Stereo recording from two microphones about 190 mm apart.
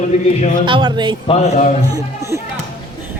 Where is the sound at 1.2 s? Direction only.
35° left (ahead or behind).